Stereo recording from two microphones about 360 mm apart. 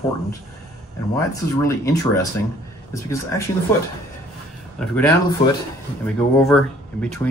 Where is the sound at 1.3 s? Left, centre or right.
Centre.